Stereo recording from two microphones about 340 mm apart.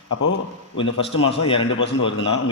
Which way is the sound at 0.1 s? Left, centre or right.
Left.